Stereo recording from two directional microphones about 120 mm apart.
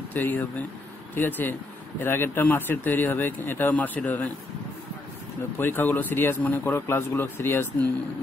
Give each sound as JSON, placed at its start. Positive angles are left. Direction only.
{"t": 0.1, "sound": "a man's voice", "side_deg": 15}
{"t": 5.6, "sound": "a man's voice", "side_deg": 15}